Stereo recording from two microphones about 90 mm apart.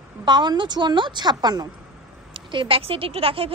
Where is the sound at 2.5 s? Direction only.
75° right (ahead or behind).